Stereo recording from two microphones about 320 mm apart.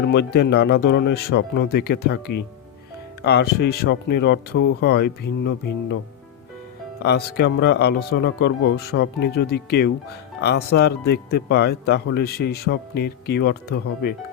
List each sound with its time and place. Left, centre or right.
0.0 s speech: left
7.0 s speech: left